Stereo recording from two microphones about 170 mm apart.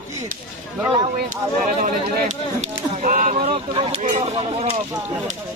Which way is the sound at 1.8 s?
45° right (ahead or behind).